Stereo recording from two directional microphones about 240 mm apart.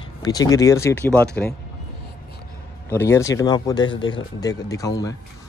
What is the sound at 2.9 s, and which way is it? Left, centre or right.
Speech, centre.